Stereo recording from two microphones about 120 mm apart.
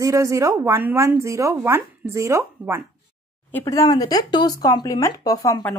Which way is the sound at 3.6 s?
30° left (ahead or behind).